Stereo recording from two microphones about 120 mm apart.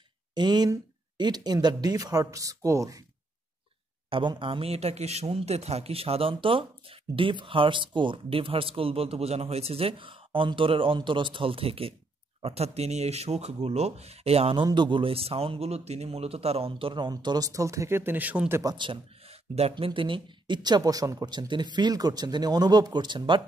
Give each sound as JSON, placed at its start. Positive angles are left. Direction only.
{"t": 0.3, "sound": "speech", "side_deg": -35}
{"t": 4.1, "sound": "a man's voice", "side_deg": -45}
{"t": 14.6, "sound": "a man's voice", "side_deg": -40}
{"t": 18.6, "sound": "a man's voice", "side_deg": -35}